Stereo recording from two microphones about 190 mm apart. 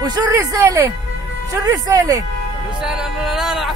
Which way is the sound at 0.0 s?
20° right (ahead or behind).